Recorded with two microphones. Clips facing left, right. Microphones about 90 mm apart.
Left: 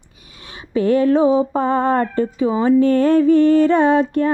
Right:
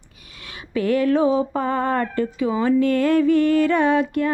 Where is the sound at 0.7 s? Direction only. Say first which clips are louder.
Left 4 dB; 30° left (ahead or behind).